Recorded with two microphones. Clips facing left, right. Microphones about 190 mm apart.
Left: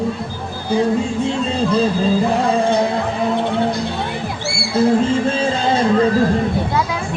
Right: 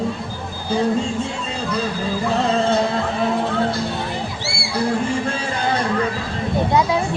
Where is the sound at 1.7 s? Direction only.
25° left (ahead or behind).